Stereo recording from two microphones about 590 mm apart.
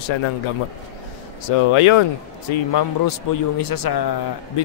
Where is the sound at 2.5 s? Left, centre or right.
Left.